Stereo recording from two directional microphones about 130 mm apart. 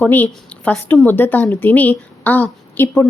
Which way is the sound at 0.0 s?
15° left (ahead or behind).